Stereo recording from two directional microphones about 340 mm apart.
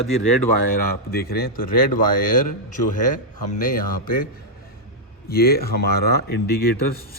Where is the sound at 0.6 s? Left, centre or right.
Left.